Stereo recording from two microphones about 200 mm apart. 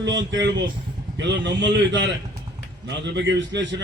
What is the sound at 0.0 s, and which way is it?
A man's voice, 65° right (ahead or behind).